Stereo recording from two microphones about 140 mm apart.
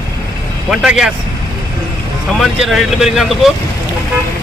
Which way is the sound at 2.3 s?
Centre (ahead or behind).